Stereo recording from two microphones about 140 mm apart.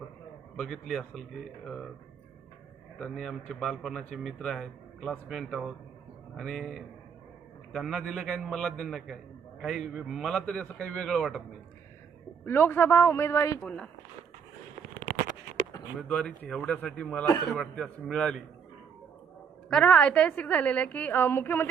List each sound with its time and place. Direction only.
0.5 s a man's voice: 5° left (ahead or behind)
3.0 s a man's voice: 5° left (ahead or behind)
12.5 s a woman's voice: 15° left (ahead or behind)
13.7 s a woman's voice: 10° left (ahead or behind)
16.0 s a woman's voice: 5° left (ahead or behind)
17.2 s a man's voice: 25° left (ahead or behind)
17.6 s a man's voice: 5° left (ahead or behind)
19.7 s a woman's voice: 5° left (ahead or behind)